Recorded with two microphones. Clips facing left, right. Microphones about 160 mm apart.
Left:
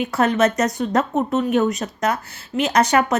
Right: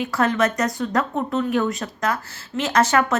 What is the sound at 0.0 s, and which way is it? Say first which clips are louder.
A woman's voice: left 3 dB; 20° left (ahead or behind).